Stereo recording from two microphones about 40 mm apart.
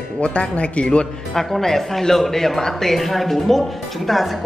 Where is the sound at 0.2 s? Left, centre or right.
Left.